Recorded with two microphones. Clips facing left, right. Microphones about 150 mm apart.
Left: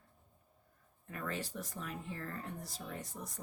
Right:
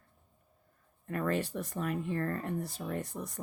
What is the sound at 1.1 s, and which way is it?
Speech, 60° right (ahead or behind).